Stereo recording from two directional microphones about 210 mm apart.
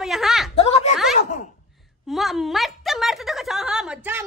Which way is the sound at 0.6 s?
30° left (ahead or behind).